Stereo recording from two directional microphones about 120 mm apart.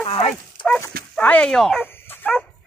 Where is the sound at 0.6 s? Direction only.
40° left (ahead or behind).